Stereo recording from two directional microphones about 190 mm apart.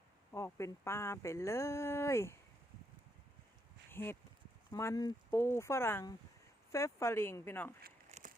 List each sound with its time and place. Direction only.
0.3 s speech: 15° left (ahead or behind)
3.9 s speech: 10° left (ahead or behind)
8.1 s a sound: 40° right (ahead or behind)